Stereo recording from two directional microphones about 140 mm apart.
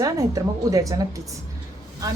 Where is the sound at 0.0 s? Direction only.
25° right (ahead or behind).